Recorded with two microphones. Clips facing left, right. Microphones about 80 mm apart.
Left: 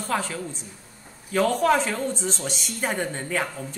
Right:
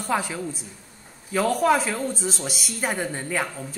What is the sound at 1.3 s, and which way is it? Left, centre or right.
Speech, centre.